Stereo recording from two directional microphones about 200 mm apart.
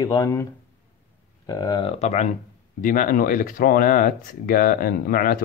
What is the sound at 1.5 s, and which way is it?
Speech, 20° left (ahead or behind).